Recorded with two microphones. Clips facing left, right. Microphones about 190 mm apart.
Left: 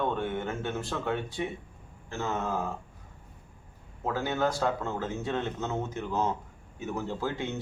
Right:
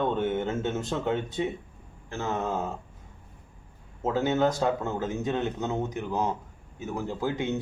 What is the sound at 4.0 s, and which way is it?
A man's voice, 20° right (ahead or behind).